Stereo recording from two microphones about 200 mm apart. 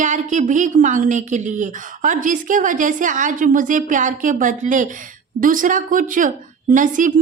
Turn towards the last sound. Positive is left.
turn(degrees=-40)  # may be behind; listen again after turning